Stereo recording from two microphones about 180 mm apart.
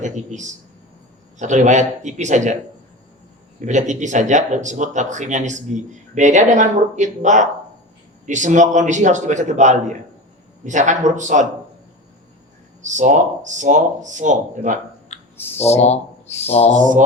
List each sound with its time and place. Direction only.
0.0 s a man's voice: 40° right (ahead or behind)
3.6 s speech: 40° right (ahead or behind)
12.8 s speech: 45° right (ahead or behind)
15.1 s clicking: 35° left (ahead or behind)
15.6 s speech: 35° left (ahead or behind)